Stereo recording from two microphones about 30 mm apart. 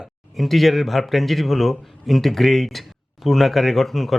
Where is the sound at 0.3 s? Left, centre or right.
Centre.